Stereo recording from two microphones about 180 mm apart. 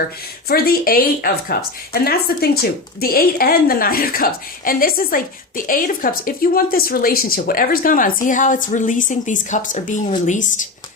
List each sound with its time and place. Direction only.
0.4 s a woman's voice: 60° left (ahead or behind)